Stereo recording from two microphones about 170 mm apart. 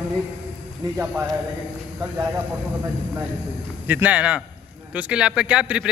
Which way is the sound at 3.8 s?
10° right (ahead or behind).